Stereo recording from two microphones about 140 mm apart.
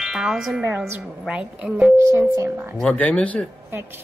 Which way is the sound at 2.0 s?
20° right (ahead or behind).